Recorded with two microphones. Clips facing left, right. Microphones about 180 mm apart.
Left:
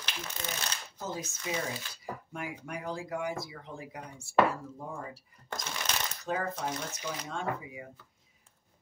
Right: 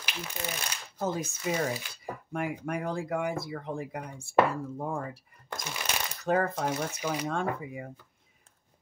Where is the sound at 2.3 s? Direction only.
55° right (ahead or behind).